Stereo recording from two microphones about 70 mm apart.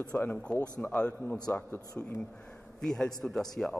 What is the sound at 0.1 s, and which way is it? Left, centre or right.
A man's voice, centre.